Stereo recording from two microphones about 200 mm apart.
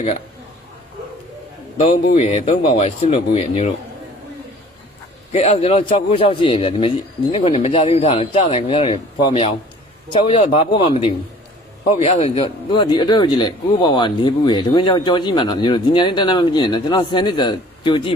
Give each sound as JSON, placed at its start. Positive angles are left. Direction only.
{"t": 1.8, "sound": "speech", "side_deg": 30}
{"t": 5.3, "sound": "speech", "side_deg": 35}